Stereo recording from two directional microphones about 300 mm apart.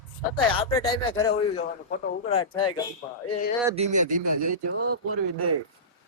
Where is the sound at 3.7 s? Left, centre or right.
Right.